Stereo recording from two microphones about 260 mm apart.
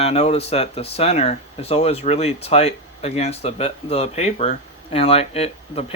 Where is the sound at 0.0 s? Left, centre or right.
Left.